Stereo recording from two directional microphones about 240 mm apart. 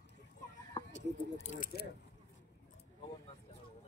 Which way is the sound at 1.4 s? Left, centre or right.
Left.